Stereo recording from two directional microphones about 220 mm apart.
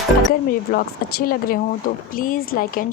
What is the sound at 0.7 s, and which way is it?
A woman's voice, 40° left (ahead or behind).